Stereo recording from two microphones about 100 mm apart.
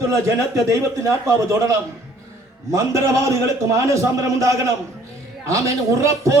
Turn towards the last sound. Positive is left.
turn(degrees=-30)  # may be behind; listen again after turning